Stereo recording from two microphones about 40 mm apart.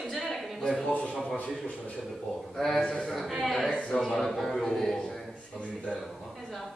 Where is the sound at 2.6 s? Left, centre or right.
Centre.